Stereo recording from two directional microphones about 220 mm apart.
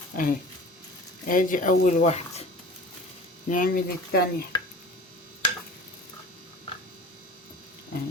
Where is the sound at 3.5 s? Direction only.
40° left (ahead or behind).